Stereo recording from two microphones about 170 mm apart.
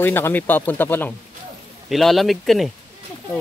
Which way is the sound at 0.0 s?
10° left (ahead or behind).